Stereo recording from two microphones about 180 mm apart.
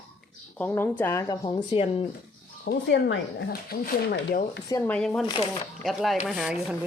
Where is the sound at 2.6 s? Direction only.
80° left; by 4.6 s 60° left (ahead or behind).